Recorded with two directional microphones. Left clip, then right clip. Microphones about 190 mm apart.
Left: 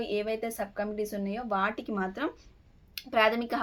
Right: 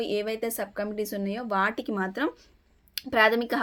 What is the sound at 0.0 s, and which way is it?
Speech, 50° right (ahead or behind).